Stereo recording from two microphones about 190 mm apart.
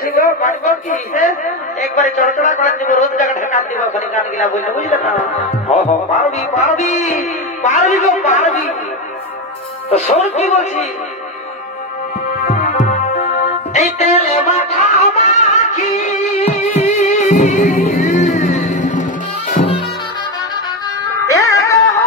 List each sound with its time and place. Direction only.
0.0 s a man's voice: 50° left (ahead or behind)
9.8 s a man's voice: 35° left (ahead or behind)
12.4 s music: 45° left (ahead or behind)
19.5 s music: 30° left (ahead or behind)
21.2 s music: 15° left (ahead or behind)